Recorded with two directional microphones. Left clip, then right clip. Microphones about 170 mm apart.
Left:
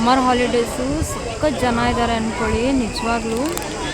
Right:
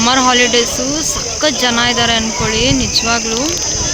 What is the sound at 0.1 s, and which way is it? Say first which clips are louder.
Speech: right 4 dB; 5° right (ahead or behind).